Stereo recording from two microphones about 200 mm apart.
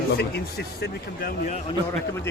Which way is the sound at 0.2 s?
55° left (ahead or behind).